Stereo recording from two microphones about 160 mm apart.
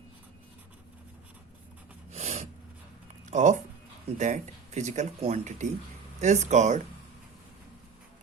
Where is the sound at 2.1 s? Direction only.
45° right (ahead or behind).